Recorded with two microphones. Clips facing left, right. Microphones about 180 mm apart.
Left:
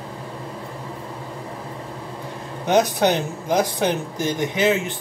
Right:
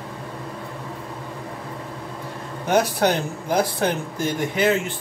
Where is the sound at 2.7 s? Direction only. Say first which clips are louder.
Left 1 dB; 20° left (ahead or behind).